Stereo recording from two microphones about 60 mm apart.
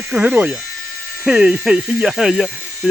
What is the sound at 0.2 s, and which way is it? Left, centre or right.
Speech, right.